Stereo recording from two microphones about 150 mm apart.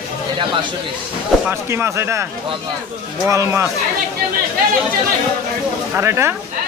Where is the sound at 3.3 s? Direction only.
20° right (ahead or behind).